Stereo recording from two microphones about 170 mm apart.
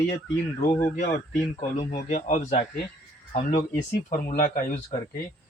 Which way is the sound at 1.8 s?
40° left (ahead or behind).